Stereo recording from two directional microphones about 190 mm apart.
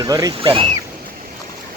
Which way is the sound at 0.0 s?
20° right (ahead or behind).